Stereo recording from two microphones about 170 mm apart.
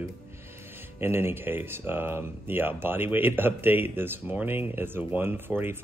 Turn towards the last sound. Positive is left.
turn(degrees=-10)  # may be behind; listen again after turning